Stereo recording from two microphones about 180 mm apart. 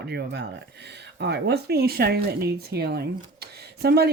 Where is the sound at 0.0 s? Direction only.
65° right (ahead or behind).